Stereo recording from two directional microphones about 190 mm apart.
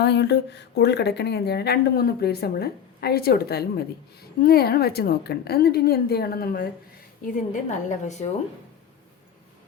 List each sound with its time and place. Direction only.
0.0 s a woman's voice: 60° left (ahead or behind)
7.3 s a woman's voice: 40° left (ahead or behind)